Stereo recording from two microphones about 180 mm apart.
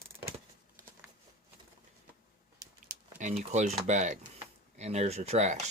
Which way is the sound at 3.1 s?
40° right (ahead or behind).